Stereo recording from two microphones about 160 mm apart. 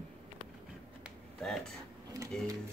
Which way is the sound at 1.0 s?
Centre (ahead or behind).